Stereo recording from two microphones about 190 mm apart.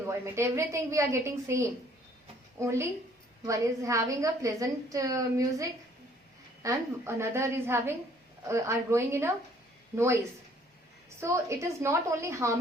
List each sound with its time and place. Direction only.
0.1 s a woman's voice: 15° right (ahead or behind)
11.2 s a woman's voice: 15° right (ahead or behind)